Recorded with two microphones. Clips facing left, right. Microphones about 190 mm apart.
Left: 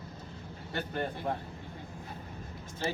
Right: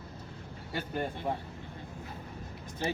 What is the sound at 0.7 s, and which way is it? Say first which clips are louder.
Speech: even; 10° right (ahead or behind).